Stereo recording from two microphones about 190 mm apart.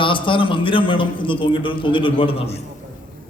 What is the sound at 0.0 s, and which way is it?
A man's voice, 25° left (ahead or behind).